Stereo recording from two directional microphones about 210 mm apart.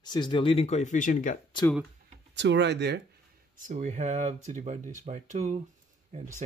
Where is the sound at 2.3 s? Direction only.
55° right (ahead or behind).